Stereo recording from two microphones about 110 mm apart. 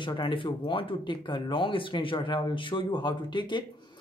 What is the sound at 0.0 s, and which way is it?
Speech, 45° left (ahead or behind).